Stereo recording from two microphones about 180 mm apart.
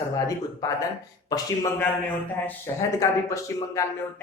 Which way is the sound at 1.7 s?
10° left (ahead or behind).